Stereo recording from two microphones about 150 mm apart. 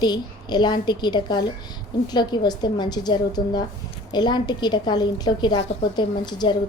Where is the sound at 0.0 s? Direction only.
30° left (ahead or behind).